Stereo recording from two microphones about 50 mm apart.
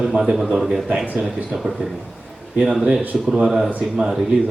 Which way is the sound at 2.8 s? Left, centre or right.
Right.